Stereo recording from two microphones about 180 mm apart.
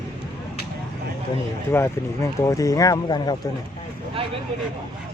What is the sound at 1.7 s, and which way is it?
Speech, 15° left (ahead or behind).